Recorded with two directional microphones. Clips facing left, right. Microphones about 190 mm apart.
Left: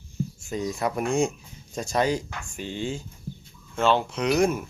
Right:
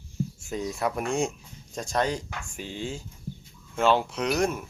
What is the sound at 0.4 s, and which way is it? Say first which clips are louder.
Speech: left 2 dB; centre (ahead or behind).